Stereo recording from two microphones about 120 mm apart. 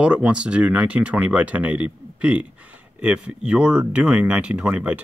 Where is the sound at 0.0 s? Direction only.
10° right (ahead or behind).